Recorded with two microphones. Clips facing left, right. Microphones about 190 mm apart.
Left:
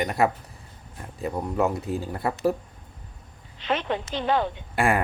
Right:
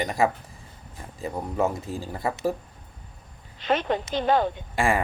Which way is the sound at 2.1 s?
5° left (ahead or behind).